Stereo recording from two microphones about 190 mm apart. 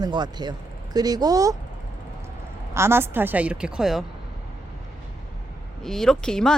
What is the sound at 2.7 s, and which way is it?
Speech, 15° right (ahead or behind).